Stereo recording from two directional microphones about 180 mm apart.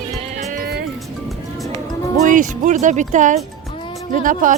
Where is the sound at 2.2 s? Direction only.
45° right (ahead or behind).